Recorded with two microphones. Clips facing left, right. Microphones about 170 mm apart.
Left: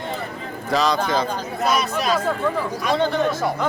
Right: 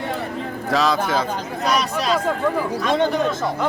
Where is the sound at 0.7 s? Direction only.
Centre (ahead or behind).